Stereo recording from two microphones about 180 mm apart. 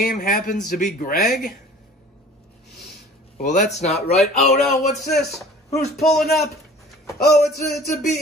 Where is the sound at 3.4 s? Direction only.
45° left (ahead or behind).